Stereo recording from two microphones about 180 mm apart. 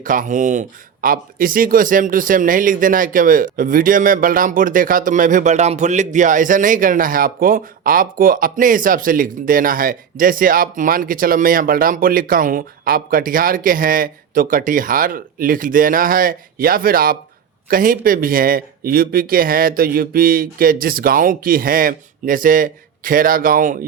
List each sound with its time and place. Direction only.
0.0 s speech: 50° right (ahead or behind)